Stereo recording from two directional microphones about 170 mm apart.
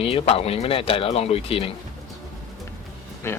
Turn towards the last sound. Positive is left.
turn(degrees=15)  # may be behind; listen again after turning